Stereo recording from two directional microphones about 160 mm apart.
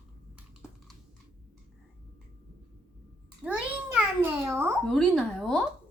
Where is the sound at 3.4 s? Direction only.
5° right (ahead or behind).